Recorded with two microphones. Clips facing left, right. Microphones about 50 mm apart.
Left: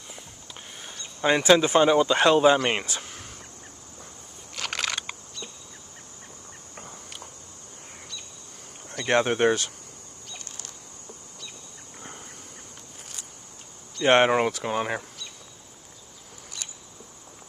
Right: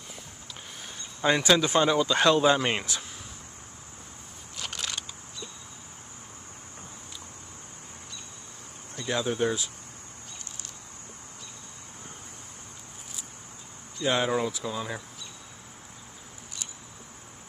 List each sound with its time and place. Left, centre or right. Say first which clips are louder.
1.2 s speech: left 3 dB; centre
4.6 s a sound: left 6 dB; left
8.9 s speech: left 6 dB; left
13.9 s speech: left 7 dB; left